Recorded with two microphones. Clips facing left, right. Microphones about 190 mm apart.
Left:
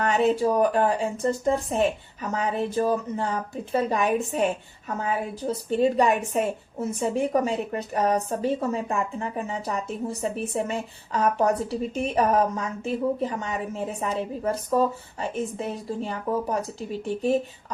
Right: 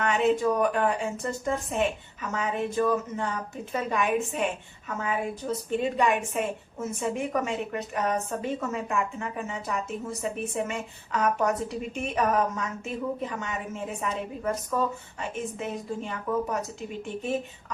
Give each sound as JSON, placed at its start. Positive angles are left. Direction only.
{"t": 0.0, "sound": "speech", "side_deg": 35}